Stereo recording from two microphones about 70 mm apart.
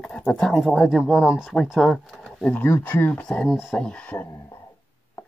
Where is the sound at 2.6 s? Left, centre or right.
Left.